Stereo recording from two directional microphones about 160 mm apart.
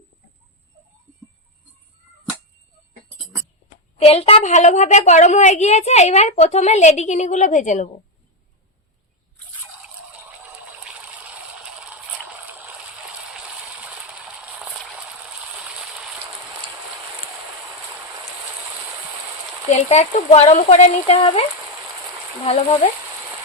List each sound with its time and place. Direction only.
3.9 s a woman's voice: 40° left (ahead or behind)
9.8 s water: 10° right (ahead or behind)
15.5 s rain on surface: 5° right (ahead or behind)
19.7 s a woman's voice: 45° left (ahead or behind)
21.2 s speech: 30° left (ahead or behind)
22.4 s a woman's voice: 45° left (ahead or behind)